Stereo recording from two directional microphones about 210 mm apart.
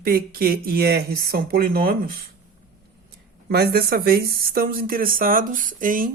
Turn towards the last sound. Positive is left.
turn(degrees=-40)  # may be behind; listen again after turning